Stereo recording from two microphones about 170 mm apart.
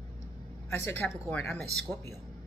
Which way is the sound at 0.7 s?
10° left (ahead or behind).